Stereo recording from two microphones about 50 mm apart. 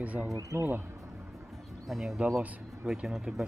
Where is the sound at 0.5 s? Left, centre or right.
Right.